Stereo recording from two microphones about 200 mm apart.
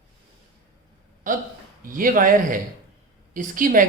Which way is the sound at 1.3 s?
40° right (ahead or behind).